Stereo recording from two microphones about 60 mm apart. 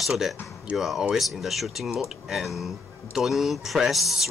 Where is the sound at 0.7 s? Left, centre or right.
Centre.